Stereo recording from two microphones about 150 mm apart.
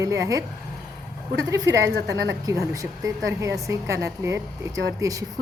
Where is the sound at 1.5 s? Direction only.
20° right (ahead or behind).